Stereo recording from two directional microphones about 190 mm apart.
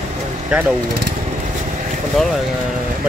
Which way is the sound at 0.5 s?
5° right (ahead or behind).